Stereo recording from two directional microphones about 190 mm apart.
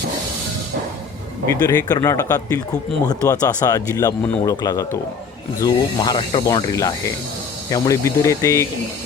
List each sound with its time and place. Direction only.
1.5 s speech: 15° left (ahead or behind)